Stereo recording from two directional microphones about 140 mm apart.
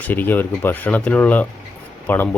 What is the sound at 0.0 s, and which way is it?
Speech, 15° left (ahead or behind).